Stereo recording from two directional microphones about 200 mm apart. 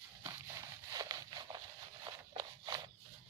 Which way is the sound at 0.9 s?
20° right (ahead or behind).